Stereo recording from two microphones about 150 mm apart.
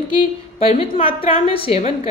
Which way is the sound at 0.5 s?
40° left (ahead or behind).